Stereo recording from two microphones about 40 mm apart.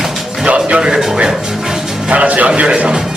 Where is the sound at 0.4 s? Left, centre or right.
Right.